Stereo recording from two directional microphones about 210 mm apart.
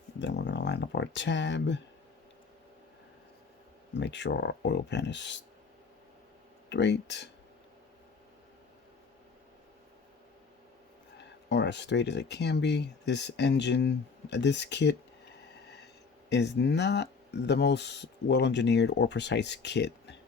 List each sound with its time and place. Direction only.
0.2 s speech: 55° left (ahead or behind)
3.9 s speech: 55° left (ahead or behind)
6.7 s speech: 55° left (ahead or behind)
11.2 s speech: 55° left (ahead or behind)
16.3 s speech: 55° left (ahead or behind)